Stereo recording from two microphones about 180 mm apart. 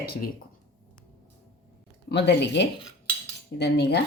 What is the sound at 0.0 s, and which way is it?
Speech, 60° left (ahead or behind).